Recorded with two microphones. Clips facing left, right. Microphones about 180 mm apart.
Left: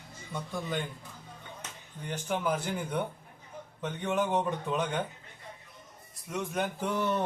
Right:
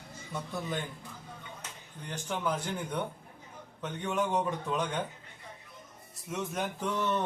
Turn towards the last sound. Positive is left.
turn(degrees=10)  # may be behind; listen again after turning